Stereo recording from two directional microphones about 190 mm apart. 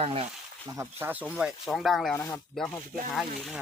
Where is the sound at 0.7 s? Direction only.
15° right (ahead or behind).